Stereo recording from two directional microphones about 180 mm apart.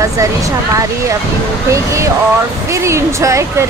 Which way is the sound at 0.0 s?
20° right (ahead or behind).